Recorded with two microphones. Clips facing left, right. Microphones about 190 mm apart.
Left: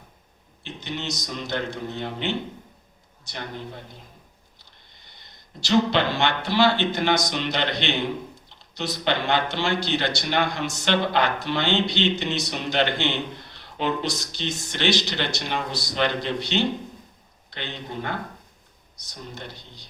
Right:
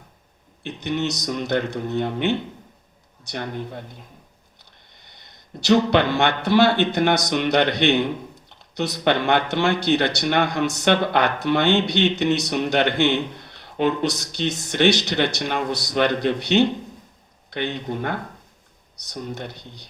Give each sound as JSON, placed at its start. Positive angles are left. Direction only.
{"t": 0.6, "sound": "speech", "side_deg": -55}
{"t": 5.5, "sound": "speech", "side_deg": -60}
{"t": 19.1, "sound": "speech", "side_deg": -60}